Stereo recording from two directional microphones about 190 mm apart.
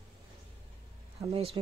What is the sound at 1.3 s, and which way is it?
Speech, 30° right (ahead or behind).